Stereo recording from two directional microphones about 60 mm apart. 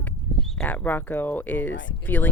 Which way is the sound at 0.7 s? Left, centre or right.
Left.